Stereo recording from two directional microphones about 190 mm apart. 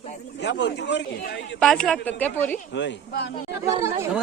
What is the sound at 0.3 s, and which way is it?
A man's voice, 65° left (ahead or behind).